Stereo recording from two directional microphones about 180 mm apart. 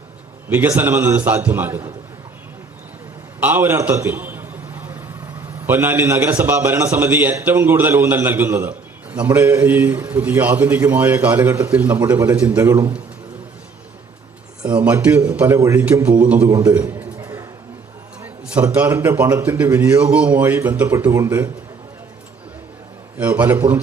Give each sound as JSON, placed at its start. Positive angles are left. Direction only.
{"t": 0.5, "sound": "a man's voice", "side_deg": -10}
{"t": 3.4, "sound": "a sound", "side_deg": -10}
{"t": 5.6, "sound": "a man's voice", "side_deg": -10}
{"t": 14.8, "sound": "a man's voice", "side_deg": -10}
{"t": 16.7, "sound": "a man's voice", "side_deg": -5}
{"t": 17.2, "sound": "a sound", "side_deg": -15}
{"t": 18.2, "sound": "a man's voice", "side_deg": -10}
{"t": 23.1, "sound": "a man's voice", "side_deg": -10}